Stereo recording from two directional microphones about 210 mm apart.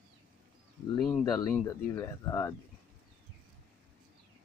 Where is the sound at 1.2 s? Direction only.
20° left (ahead or behind).